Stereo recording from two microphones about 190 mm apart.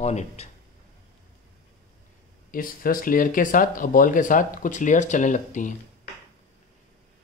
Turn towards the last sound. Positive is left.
turn(degrees=40)  # may be behind; listen again after turning